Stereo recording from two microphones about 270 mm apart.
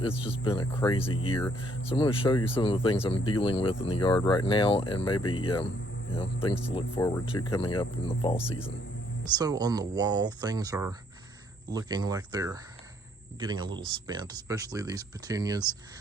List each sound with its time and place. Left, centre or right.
0.0 s speech: left
5.2 s speech: left
6.1 s speech: left
9.2 s speech: centre